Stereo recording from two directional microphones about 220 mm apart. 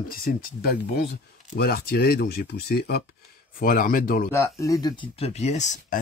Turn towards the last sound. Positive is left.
turn(degrees=35)  # may be behind; listen again after turning